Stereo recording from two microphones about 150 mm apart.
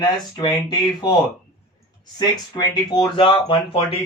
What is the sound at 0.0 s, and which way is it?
Speech, 25° left (ahead or behind).